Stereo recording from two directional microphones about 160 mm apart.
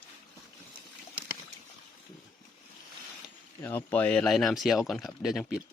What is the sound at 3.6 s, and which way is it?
Speech, 10° left (ahead or behind).